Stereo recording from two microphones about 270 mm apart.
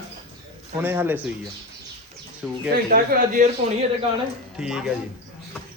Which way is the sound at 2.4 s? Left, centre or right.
Centre.